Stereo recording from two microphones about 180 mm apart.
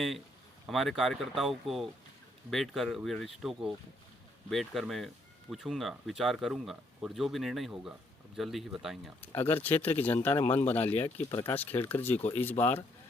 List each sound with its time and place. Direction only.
0.7 s speech: centre (ahead or behind)
9.2 s speech: 10° left (ahead or behind)